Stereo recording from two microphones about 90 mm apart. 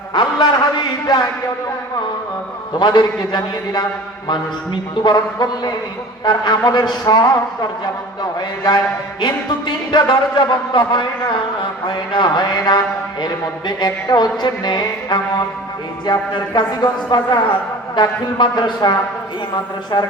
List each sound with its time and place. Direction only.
0.1 s a sound: 55° left (ahead or behind)
2.7 s music: 55° left (ahead or behind)
4.3 s speech: 55° left (ahead or behind)
6.2 s music: 50° left (ahead or behind)
8.2 s a man's voice: 50° left (ahead or behind)
11.9 s music: 55° left (ahead or behind)
17.9 s speech: 55° left (ahead or behind)